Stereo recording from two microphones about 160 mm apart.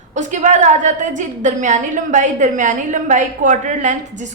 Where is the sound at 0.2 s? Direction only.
50° right (ahead or behind).